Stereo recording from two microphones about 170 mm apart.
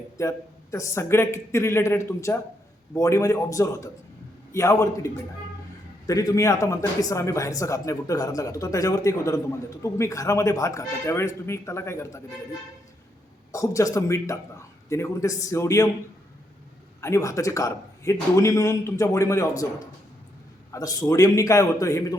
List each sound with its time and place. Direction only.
0.2 s a man's voice: 15° left (ahead or behind)
13.5 s a man's voice: 20° left (ahead or behind)
17.0 s a man's voice: 20° left (ahead or behind)